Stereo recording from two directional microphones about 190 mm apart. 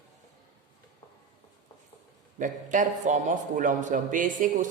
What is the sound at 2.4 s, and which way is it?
A man's voice, 40° right (ahead or behind).